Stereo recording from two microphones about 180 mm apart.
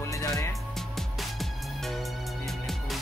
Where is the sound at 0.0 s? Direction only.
20° left (ahead or behind).